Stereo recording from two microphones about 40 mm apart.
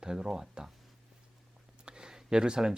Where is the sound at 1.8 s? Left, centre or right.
Right.